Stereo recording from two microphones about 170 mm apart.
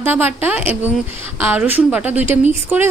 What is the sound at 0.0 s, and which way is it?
A woman's voice, 10° right (ahead or behind).